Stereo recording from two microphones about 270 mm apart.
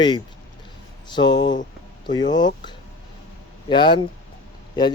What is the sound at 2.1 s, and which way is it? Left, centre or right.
Speech, centre.